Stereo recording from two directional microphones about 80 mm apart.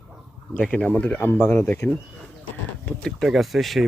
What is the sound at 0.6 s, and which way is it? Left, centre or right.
Speech, centre.